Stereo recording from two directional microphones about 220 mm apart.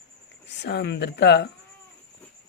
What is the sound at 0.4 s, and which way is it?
Speech, 50° left (ahead or behind).